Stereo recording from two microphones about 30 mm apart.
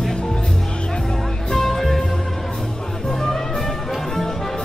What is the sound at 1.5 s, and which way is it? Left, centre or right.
Music, centre.